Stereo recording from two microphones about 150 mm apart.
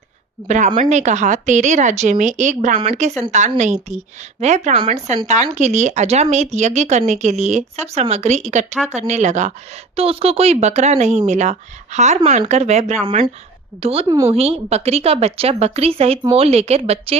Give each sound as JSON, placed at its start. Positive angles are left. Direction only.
{"t": 0.4, "sound": "speech", "side_deg": -55}
{"t": 9.9, "sound": "speech", "side_deg": -40}